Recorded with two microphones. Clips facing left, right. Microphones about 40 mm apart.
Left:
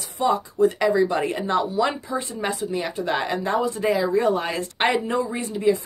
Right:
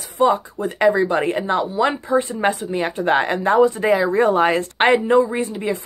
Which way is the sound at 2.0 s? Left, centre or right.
Right.